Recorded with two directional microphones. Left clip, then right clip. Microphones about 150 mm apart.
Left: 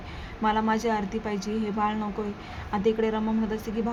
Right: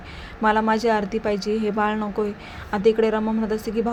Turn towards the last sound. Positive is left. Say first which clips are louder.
# right 6 dB
turn(degrees=-30)  # may be behind; listen again after turning